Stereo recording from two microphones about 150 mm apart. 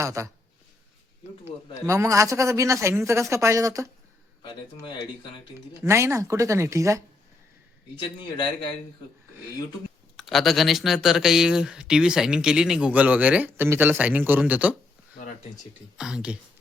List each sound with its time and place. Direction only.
0.0 s a man's voice: 20° right (ahead or behind)
1.5 s a man's voice: 20° right (ahead or behind)
4.4 s speech: 30° left (ahead or behind)
5.8 s a man's voice: 20° right (ahead or behind)
7.9 s speech: 30° left (ahead or behind)
10.2 s speech: centre (ahead or behind)
16.0 s speech: 5° right (ahead or behind)